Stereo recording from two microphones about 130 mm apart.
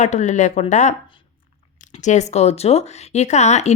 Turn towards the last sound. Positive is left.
turn(degrees=60)  # may be behind; listen again after turning